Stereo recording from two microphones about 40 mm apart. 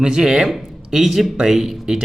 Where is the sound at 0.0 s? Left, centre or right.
Centre.